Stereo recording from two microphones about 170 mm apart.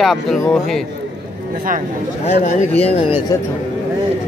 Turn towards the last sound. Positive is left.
turn(degrees=35)  # may be behind; listen again after turning